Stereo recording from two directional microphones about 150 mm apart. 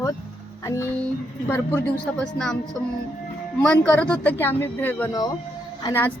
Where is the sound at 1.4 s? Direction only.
15° left (ahead or behind).